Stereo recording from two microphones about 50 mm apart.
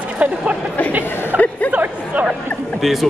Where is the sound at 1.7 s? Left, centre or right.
Right.